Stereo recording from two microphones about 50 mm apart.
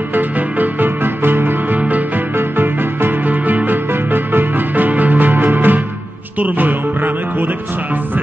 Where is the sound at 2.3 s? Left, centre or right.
Right.